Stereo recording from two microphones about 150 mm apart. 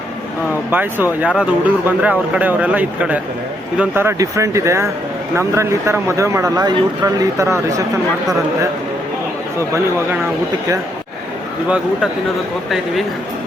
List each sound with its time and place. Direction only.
0.7 s speech: 10° right (ahead or behind)
9.6 s speech: 20° right (ahead or behind)